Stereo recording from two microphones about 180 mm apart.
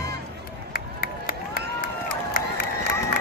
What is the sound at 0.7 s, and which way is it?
Run, 55° left (ahead or behind).